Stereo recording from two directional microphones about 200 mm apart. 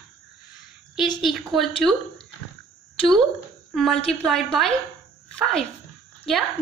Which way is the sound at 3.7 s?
Centre (ahead or behind).